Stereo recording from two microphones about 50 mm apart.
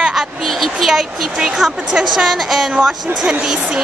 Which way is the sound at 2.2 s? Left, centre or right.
Centre.